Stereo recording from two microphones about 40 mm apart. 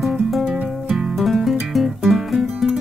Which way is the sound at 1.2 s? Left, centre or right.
Centre.